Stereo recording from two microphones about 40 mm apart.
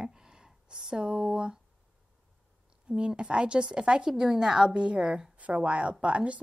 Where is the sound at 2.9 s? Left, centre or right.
Right.